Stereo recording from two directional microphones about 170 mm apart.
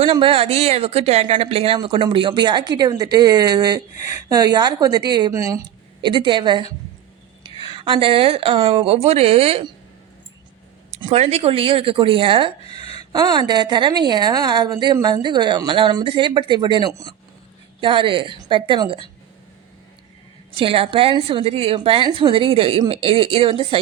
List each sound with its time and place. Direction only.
0.0 s speech: 30° right (ahead or behind)
11.0 s a woman's voice: 35° right (ahead or behind)
12.6 s a sound: 35° left (ahead or behind)
13.1 s speech: 25° right (ahead or behind)
20.6 s a woman's voice: 30° right (ahead or behind)